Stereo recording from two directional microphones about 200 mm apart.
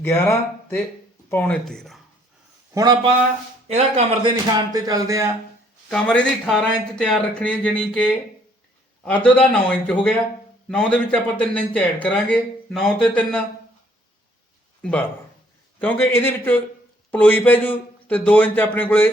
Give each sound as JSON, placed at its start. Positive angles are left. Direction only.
{"t": 0.0, "sound": "speech", "side_deg": 15}
{"t": 2.7, "sound": "speech", "side_deg": -20}
{"t": 5.9, "sound": "a man's voice", "side_deg": 5}
{"t": 14.8, "sound": "a man's voice", "side_deg": 5}